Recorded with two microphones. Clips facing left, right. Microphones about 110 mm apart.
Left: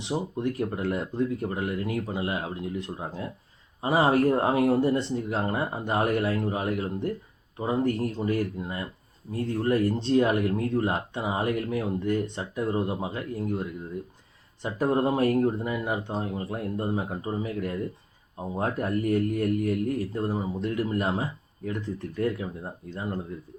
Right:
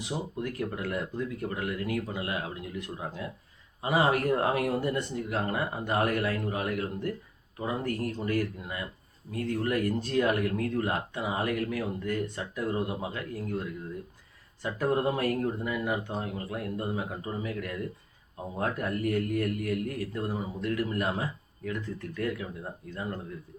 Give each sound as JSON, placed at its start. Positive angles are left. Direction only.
{"t": 0.0, "sound": "speech", "side_deg": 25}